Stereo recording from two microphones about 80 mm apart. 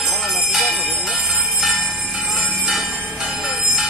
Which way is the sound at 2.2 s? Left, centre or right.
Centre.